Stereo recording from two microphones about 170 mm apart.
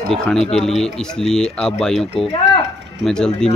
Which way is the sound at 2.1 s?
35° left (ahead or behind).